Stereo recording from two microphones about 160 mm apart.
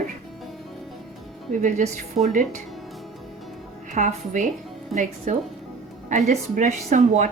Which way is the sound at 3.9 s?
50° right (ahead or behind).